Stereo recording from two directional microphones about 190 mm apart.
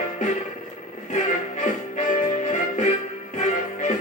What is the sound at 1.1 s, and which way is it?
Music, 40° left (ahead or behind).